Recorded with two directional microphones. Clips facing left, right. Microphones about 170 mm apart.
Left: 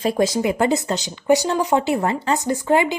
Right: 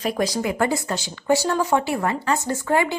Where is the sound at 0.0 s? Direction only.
25° left (ahead or behind).